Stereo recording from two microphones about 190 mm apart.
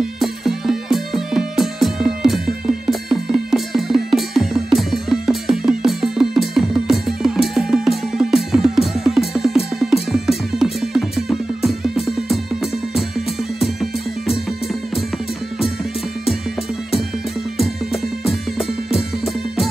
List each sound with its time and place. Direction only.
0.2 s music: centre (ahead or behind)
13.6 s music: centre (ahead or behind)
18.9 s music: centre (ahead or behind)